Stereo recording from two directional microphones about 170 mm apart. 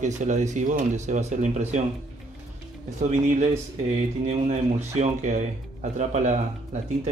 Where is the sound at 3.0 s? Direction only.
45° right (ahead or behind).